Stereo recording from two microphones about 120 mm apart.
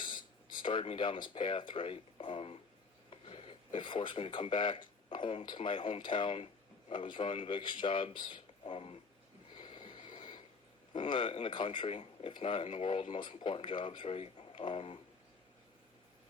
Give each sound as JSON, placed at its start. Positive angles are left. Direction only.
{"t": 0.0, "sound": "speech", "side_deg": 40}
{"t": 9.6, "sound": "a sound", "side_deg": 40}
{"t": 10.9, "sound": "speech", "side_deg": 45}